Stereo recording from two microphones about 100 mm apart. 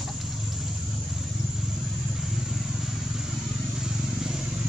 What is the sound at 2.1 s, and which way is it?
Vehicle, 5° right (ahead or behind).